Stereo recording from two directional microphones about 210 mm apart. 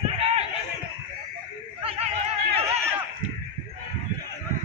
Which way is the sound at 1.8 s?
25° right (ahead or behind).